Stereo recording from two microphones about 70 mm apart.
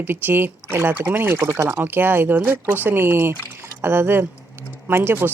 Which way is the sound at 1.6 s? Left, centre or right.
Right.